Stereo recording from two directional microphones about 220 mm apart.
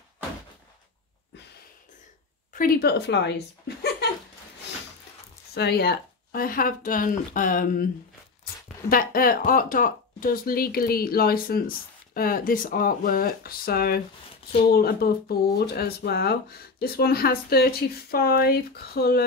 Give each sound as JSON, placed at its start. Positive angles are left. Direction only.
{"t": 2.5, "sound": "speech", "side_deg": 40}
{"t": 5.5, "sound": "speech", "side_deg": 45}